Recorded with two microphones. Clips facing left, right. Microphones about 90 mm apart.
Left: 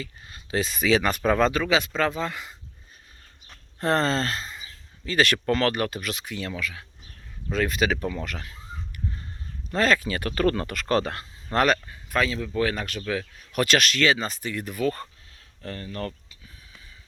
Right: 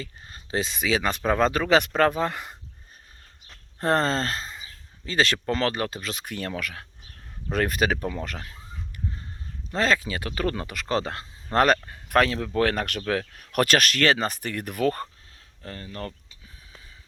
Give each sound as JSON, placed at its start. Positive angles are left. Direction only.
{"t": 0.0, "sound": "speech", "side_deg": -35}
{"t": 1.4, "sound": "speech", "side_deg": -35}
{"t": 1.7, "sound": "speech", "side_deg": -50}
{"t": 3.8, "sound": "speech", "side_deg": -35}
{"t": 6.2, "sound": "speech", "side_deg": -50}
{"t": 8.0, "sound": "a sound", "side_deg": -30}
{"t": 9.7, "sound": "speech", "side_deg": -25}
{"t": 11.5, "sound": "speech", "side_deg": -40}
{"t": 12.0, "sound": "speech", "side_deg": -60}
{"t": 15.6, "sound": "speech", "side_deg": -20}